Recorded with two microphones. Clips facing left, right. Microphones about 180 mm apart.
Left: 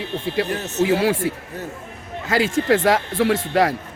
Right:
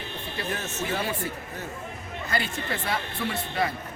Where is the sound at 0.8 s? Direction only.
90° left.